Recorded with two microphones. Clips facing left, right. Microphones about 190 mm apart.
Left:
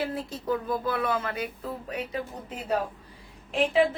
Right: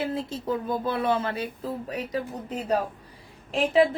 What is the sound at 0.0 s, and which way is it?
A woman's voice, 25° right (ahead or behind).